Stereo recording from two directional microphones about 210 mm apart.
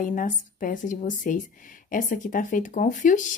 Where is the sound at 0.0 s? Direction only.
40° left (ahead or behind).